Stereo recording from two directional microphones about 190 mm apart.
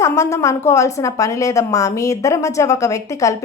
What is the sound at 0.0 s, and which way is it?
A woman's voice, 15° left (ahead or behind).